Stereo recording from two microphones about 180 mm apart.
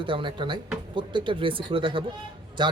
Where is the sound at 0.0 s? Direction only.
25° right (ahead or behind).